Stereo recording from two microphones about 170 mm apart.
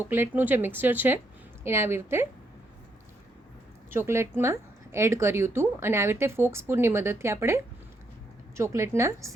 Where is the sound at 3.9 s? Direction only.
15° right (ahead or behind).